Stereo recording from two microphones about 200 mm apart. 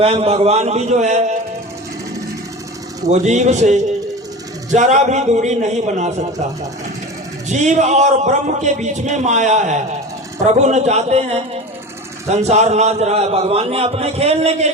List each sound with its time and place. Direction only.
0.0 s a man's voice: 30° right (ahead or behind)
3.1 s a man's voice: 35° right (ahead or behind)
7.4 s a man's voice: 35° right (ahead or behind)